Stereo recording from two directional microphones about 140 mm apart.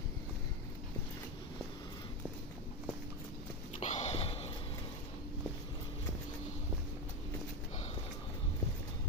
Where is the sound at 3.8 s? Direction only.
50° left (ahead or behind).